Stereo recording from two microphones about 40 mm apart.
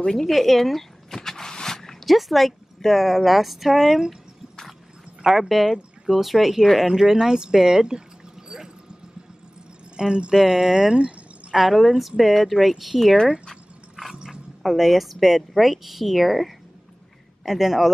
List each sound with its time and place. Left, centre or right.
0.0 s speech: centre
0.3 s zipper: centre
2.1 s speech: centre
5.2 s speech: centre
9.9 s speech: right
10.3 s speech: centre
11.5 s speech: centre
14.1 s a sound: centre
14.6 s speech: centre